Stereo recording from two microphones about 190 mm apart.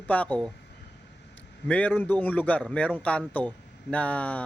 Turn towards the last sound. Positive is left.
turn(degrees=5)  # may be behind; listen again after turning